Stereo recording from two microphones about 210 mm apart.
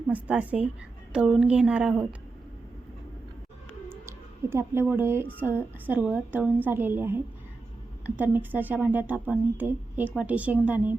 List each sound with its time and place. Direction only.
0.1 s a woman's voice: 5° right (ahead or behind)
3.8 s a sound: 10° right (ahead or behind)
5.4 s a woman's voice: 10° right (ahead or behind)